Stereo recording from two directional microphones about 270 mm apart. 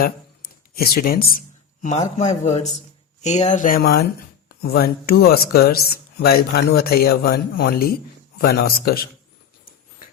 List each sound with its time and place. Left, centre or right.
0.0 s speech: left